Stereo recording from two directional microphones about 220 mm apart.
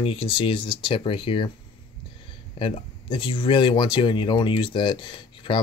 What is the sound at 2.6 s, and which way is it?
Speech, 25° left (ahead or behind).